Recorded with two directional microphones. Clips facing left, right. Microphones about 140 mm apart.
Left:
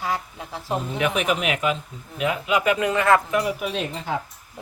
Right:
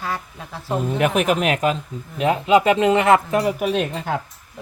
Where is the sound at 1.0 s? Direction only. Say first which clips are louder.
Right 5 dB; 45° right (ahead or behind); by 3.2 s 20° right (ahead or behind).